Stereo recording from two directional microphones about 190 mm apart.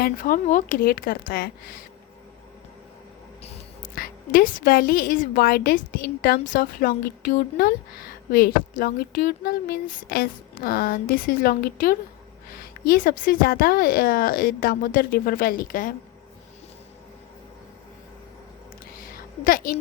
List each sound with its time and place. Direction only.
0.0 s speech: 50° left (ahead or behind)
3.9 s speech: 50° left (ahead or behind)
19.1 s a sound: 50° left (ahead or behind)